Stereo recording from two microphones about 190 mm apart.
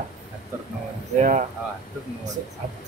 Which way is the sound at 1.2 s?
40° right (ahead or behind).